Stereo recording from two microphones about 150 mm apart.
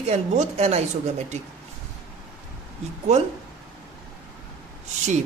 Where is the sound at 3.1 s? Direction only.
50° right (ahead or behind).